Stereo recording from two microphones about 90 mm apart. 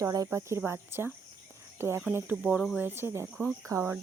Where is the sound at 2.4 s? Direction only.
10° right (ahead or behind).